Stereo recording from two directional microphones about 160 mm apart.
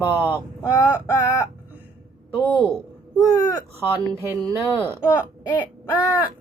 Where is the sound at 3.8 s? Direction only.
15° right (ahead or behind).